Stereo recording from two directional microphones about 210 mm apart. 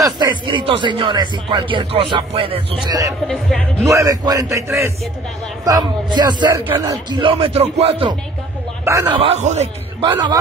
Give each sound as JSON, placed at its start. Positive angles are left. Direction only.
{"t": 0.0, "sound": "speech", "side_deg": -20}
{"t": 3.3, "sound": "speech", "side_deg": 5}
{"t": 3.8, "sound": "a man's voice", "side_deg": -15}
{"t": 8.8, "sound": "a man's voice", "side_deg": -15}
{"t": 9.2, "sound": "speech", "side_deg": -30}